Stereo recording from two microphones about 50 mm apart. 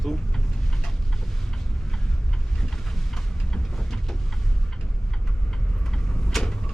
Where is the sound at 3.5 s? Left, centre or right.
Centre.